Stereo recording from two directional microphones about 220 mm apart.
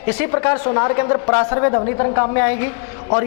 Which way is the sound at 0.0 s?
10° left (ahead or behind).